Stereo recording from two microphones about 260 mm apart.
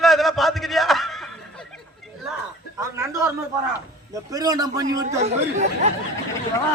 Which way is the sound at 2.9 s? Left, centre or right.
Centre.